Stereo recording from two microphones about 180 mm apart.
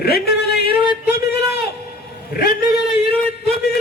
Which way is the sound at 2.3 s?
55° left (ahead or behind).